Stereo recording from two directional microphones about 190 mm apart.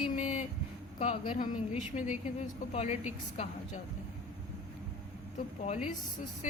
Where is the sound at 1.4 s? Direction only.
45° left (ahead or behind).